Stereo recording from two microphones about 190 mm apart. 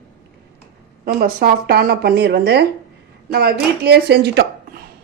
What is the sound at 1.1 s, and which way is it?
A woman's voice, 50° right (ahead or behind).